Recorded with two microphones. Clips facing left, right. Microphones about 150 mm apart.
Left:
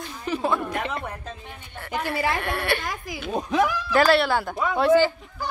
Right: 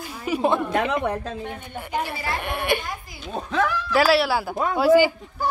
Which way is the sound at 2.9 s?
90° left.